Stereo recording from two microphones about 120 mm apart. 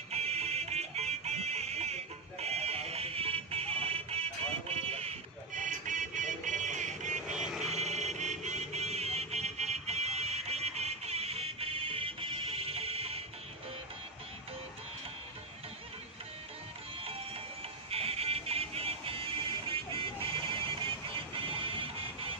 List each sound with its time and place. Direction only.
0.1 s music: 60° right (ahead or behind)
5.6 s music: 90° right
7.2 s vehicle: 5° right (ahead or behind)
7.7 s music: 70° right (ahead or behind)
17.9 s music: 55° right (ahead or behind)
21.4 s music: 45° right (ahead or behind)